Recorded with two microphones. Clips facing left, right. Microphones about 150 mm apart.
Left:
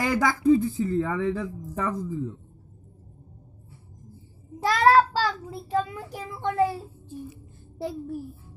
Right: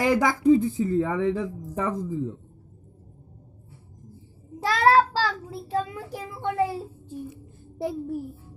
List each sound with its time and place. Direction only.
0.0 s speech: 20° right (ahead or behind)
4.8 s child singing: centre (ahead or behind)
6.1 s a child's voice: 5° right (ahead or behind)